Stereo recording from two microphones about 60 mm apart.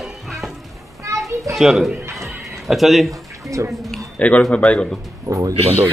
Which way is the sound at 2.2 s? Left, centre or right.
Centre.